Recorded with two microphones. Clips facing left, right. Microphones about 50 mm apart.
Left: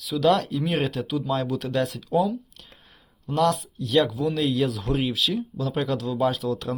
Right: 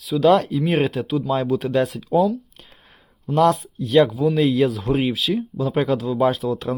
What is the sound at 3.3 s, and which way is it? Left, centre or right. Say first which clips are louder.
Speech: right 5 dB; right.